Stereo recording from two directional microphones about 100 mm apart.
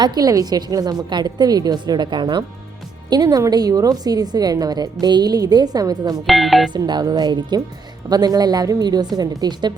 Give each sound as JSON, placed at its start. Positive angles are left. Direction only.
{"t": 0.0, "sound": "a woman's voice", "side_deg": -40}
{"t": 3.1, "sound": "a woman's voice", "side_deg": -40}
{"t": 6.1, "sound": "speech", "side_deg": 0}
{"t": 6.7, "sound": "a woman's voice", "side_deg": -45}